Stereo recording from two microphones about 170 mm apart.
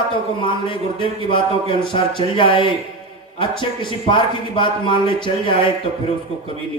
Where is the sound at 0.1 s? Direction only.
30° left (ahead or behind).